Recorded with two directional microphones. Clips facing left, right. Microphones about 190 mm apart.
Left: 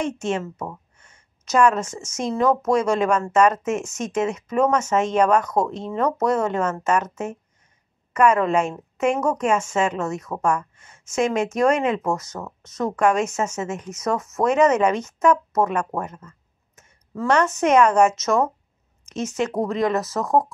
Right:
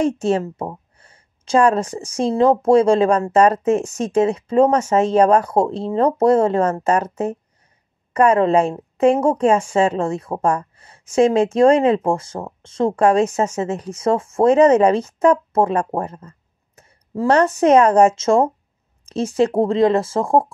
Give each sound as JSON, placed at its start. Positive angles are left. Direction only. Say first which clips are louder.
{"t": 0.0, "sound": "a woman's voice", "louder": "right 6 dB", "side_deg": -35}